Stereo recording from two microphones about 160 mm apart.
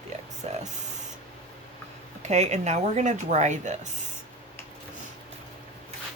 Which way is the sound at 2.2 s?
45° right (ahead or behind).